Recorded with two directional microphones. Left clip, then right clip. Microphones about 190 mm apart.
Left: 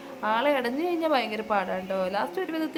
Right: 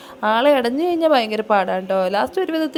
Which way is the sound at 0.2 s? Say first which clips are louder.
Right 9 dB; 40° right (ahead or behind).